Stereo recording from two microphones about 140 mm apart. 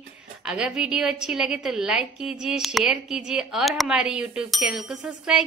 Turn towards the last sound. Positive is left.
turn(degrees=-5)  # may be behind; listen again after turning